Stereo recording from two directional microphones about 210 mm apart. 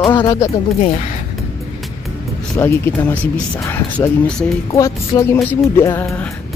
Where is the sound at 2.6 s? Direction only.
10° left (ahead or behind).